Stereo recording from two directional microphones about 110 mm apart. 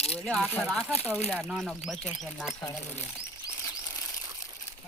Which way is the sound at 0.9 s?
15° left (ahead or behind).